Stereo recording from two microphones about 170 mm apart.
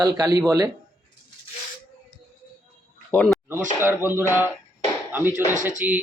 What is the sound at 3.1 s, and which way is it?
Speech, 5° left (ahead or behind).